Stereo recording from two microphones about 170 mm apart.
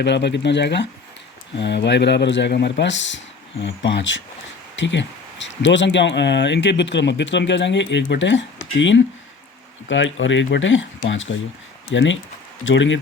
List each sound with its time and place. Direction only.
0.0 s speech: 90° left
9.9 s speech: 90° left